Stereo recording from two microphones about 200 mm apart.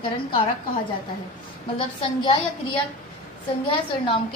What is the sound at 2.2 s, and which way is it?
A woman's voice, 25° left (ahead or behind).